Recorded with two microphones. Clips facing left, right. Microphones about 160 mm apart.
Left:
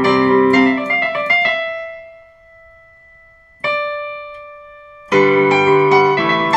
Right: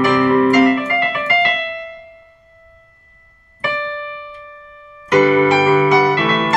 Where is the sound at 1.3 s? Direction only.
30° left (ahead or behind).